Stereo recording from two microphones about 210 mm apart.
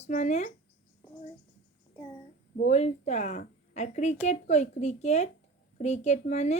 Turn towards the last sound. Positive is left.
turn(degrees=35)  # may be behind; listen again after turning